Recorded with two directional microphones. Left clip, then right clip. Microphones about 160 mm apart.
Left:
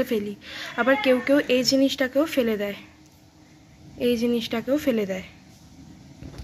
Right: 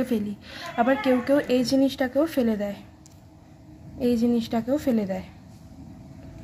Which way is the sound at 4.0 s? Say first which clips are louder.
Left 1 dB; 15° left (ahead or behind).